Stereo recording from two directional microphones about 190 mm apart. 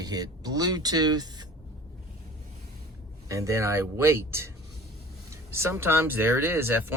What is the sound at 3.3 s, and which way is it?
Speech, 15° right (ahead or behind).